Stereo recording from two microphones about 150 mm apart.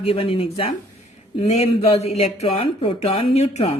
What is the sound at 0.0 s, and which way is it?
Speech, 40° left (ahead or behind).